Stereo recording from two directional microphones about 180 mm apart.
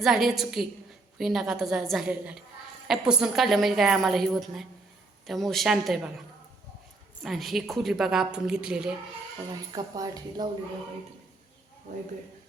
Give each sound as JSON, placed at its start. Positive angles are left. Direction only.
{"t": 0.0, "sound": "a woman's voice", "side_deg": 0}
{"t": 7.2, "sound": "a woman's voice", "side_deg": 0}
{"t": 9.7, "sound": "a woman's voice", "side_deg": -20}